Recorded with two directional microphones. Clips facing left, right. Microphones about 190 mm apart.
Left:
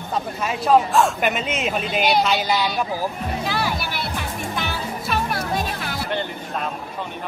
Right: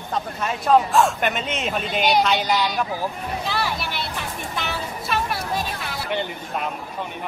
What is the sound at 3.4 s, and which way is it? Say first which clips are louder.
Music: left 1 dB; centre (ahead or behind).